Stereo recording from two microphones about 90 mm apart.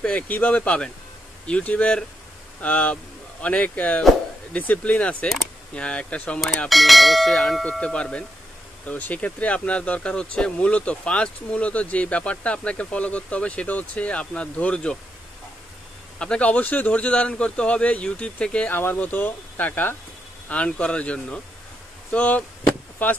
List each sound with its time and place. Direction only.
0.0 s speech: 15° left (ahead or behind)
6.7 s church bell: centre (ahead or behind)
7.8 s speech: 10° left (ahead or behind)
16.2 s speech: 10° left (ahead or behind)
22.6 s a sound: 25° left (ahead or behind)